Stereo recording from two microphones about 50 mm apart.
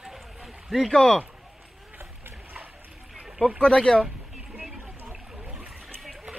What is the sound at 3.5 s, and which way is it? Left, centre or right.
Speech, centre.